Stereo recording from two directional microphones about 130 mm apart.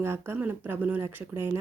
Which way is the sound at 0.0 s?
20° right (ahead or behind).